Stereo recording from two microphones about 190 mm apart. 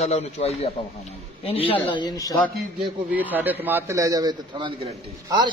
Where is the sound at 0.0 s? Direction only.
35° left (ahead or behind).